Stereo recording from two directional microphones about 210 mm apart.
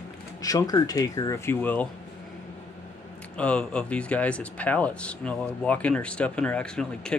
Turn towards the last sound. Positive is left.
turn(degrees=5)  # may be behind; listen again after turning